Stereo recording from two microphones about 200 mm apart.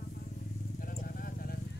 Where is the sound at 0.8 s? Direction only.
45° left (ahead or behind).